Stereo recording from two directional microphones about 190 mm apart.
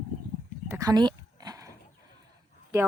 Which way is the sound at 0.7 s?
20° right (ahead or behind).